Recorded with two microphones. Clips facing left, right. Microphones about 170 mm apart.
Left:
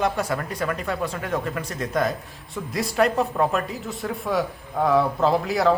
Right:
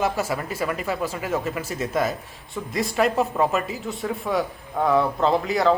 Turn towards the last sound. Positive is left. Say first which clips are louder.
# even
turn(degrees=0)  # may be behind; listen again after turning